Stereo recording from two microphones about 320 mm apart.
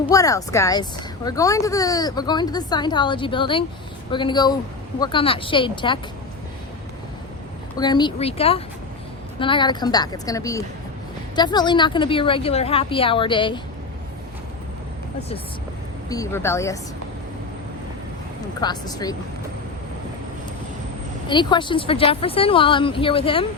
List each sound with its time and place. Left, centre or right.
0.0 s a woman's voice: centre
7.8 s a woman's voice: centre
16.0 s a woman's voice: centre
18.6 s a woman's voice: centre
21.2 s a woman's voice: centre